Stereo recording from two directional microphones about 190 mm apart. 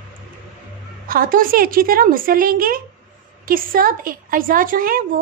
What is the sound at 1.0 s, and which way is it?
Speech, 50° right (ahead or behind).